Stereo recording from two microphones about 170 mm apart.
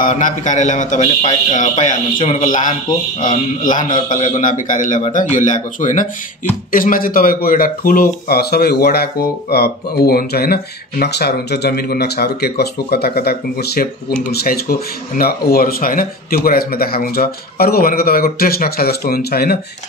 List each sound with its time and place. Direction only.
0.0 s a man's voice: 50° left (ahead or behind); by 19.6 s 65° left (ahead or behind)